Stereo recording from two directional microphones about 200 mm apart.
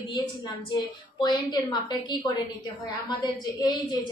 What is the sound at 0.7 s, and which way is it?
A woman's voice, 20° left (ahead or behind).